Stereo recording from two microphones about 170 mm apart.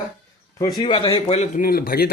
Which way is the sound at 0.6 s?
25° left (ahead or behind).